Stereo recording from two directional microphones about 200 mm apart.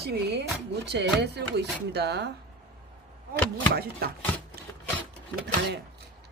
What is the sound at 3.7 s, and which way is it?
Speech, 50° right (ahead or behind).